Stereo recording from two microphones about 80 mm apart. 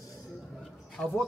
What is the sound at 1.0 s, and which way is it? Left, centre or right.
Speech, centre.